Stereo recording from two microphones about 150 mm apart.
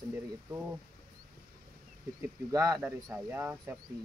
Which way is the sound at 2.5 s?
20° right (ahead or behind).